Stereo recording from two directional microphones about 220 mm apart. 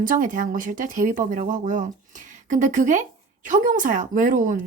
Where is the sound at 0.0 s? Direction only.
35° right (ahead or behind).